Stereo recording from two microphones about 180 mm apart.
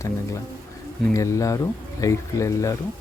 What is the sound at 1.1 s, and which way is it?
Speech, 15° left (ahead or behind).